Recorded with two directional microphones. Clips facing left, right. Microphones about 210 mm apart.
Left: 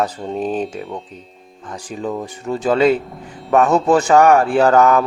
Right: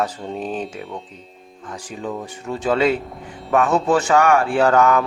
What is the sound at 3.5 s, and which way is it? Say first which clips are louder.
Speech: left 3 dB; 35° left (ahead or behind).